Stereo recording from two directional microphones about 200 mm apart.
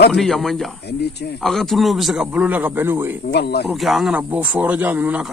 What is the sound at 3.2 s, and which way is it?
Livestock, 55° left (ahead or behind).